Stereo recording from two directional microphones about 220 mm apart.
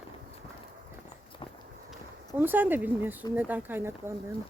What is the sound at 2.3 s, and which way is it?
Speech, 10° right (ahead or behind).